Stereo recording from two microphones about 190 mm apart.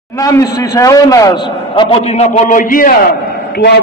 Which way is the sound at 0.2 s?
20° left (ahead or behind).